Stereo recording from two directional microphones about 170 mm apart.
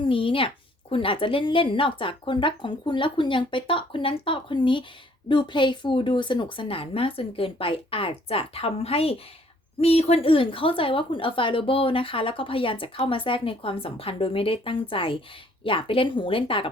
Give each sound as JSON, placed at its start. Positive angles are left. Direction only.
{"t": 0.0, "sound": "a woman's voice", "side_deg": 30}